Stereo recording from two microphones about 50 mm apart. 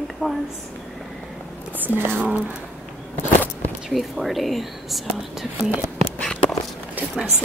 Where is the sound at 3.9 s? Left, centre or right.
Centre.